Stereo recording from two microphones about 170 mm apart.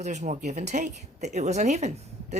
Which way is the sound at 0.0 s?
45° right (ahead or behind).